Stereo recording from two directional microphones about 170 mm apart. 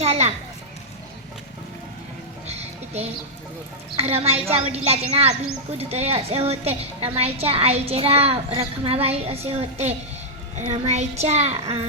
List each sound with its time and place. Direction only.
0.0 s children playing: 40° right (ahead or behind)
2.5 s music: 40° right (ahead or behind)
3.9 s a woman's voice: 35° right (ahead or behind)